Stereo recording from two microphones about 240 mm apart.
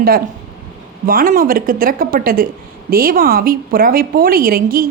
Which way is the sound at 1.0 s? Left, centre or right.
Right.